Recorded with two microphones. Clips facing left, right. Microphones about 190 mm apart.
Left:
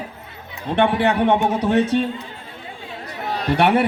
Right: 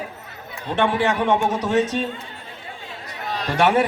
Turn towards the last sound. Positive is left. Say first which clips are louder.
# left 1 dB
turn(degrees=65)  # may be behind; listen again after turning